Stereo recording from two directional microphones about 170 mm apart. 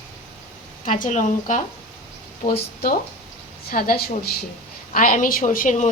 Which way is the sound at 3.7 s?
60° left (ahead or behind).